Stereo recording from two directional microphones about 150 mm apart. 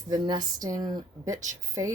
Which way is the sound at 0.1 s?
25° right (ahead or behind).